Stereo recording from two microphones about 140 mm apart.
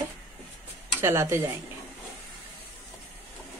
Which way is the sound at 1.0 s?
20° right (ahead or behind).